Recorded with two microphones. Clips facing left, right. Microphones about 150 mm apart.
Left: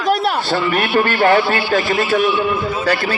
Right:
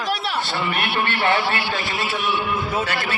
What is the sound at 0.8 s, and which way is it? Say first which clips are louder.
A man's voice: left 8 dB; 45° left (ahead or behind).